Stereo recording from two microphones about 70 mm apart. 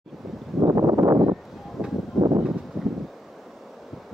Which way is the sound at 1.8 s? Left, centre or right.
Centre.